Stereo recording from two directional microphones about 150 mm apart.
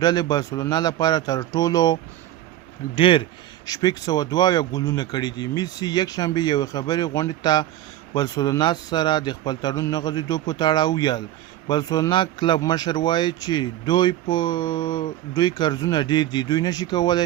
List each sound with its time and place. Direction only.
0.0 s a man's voice: 25° left (ahead or behind)